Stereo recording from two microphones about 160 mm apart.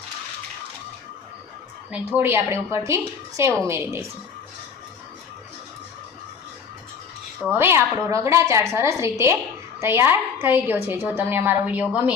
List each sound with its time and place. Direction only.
1.9 s a woman's voice: 10° right (ahead or behind)
7.6 s a woman's voice: 15° right (ahead or behind)